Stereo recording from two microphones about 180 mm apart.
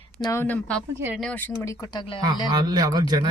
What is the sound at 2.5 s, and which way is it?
Speech, 20° right (ahead or behind).